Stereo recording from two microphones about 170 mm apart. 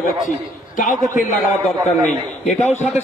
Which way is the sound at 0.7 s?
50° left (ahead or behind).